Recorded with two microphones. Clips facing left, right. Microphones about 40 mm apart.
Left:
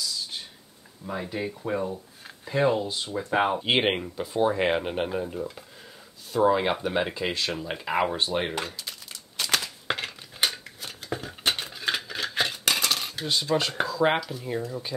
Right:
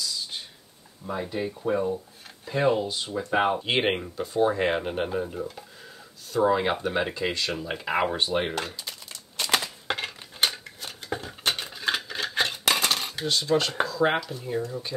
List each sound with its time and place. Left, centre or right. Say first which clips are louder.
1.0 s speech: right 1 dB; centre
2.2 s speech: even; centre
8.7 s crumpling: even; centre
9.8 s a sound: even; centre
12.7 s cutlery: right 1 dB; centre
13.0 s cutlery: right 2 dB; centre
13.3 s speech: right 1 dB; centre